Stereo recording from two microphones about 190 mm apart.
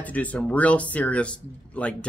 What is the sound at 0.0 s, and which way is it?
Speech, 10° left (ahead or behind).